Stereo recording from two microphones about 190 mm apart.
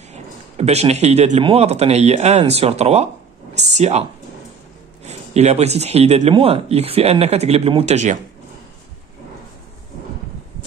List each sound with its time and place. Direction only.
0.1 s speech: 35° right (ahead or behind)
5.0 s speech: 35° right (ahead or behind)